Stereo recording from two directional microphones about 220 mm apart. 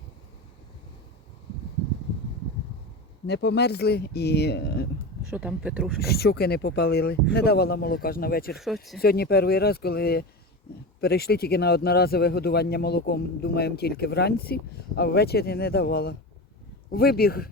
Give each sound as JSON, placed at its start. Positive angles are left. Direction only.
{"t": 3.2, "sound": "speech", "side_deg": 50}
{"t": 5.3, "sound": "speech", "side_deg": -5}
{"t": 6.0, "sound": "speech", "side_deg": 45}
{"t": 8.5, "sound": "speech", "side_deg": 0}
{"t": 9.0, "sound": "speech", "side_deg": 45}